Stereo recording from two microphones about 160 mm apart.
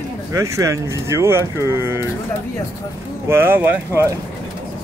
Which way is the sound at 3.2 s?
15° right (ahead or behind).